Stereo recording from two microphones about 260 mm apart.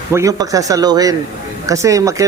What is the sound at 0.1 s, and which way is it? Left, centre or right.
Speech, centre.